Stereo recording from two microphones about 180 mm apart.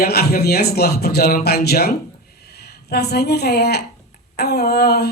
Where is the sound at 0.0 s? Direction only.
60° left (ahead or behind).